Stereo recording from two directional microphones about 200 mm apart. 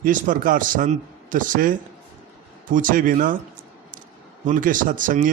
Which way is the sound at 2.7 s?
40° right (ahead or behind).